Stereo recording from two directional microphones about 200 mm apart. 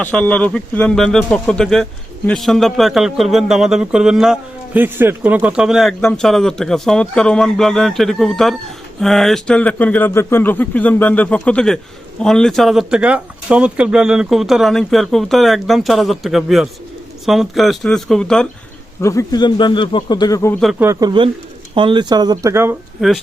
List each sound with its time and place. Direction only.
0.0 s speech: 5° left (ahead or behind)
19.0 s speech: 15° left (ahead or behind)
20.7 s speech: 15° right (ahead or behind)
23.0 s speech: centre (ahead or behind)